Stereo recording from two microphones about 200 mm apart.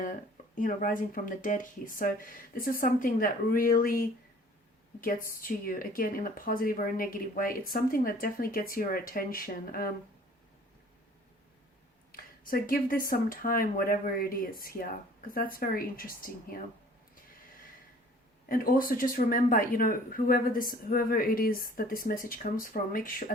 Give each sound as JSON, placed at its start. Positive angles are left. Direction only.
{"t": 0.0, "sound": "speech", "side_deg": 40}
{"t": 4.9, "sound": "speech", "side_deg": 45}
{"t": 12.1, "sound": "speech", "side_deg": 45}
{"t": 18.4, "sound": "speech", "side_deg": 45}